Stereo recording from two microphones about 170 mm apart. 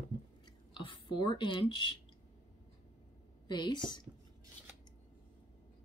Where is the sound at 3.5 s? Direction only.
25° left (ahead or behind).